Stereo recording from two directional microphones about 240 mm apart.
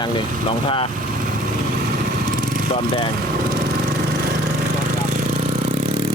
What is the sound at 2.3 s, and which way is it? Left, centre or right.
Vehicle, right.